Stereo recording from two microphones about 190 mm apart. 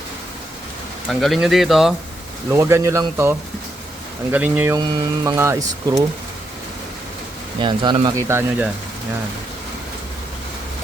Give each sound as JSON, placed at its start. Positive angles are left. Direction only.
{"t": 1.0, "sound": "speech", "side_deg": 0}
{"t": 2.5, "sound": "speech", "side_deg": -15}
{"t": 4.8, "sound": "speech", "side_deg": -20}
{"t": 7.6, "sound": "speech", "side_deg": -25}
{"t": 8.3, "sound": "speech", "side_deg": -10}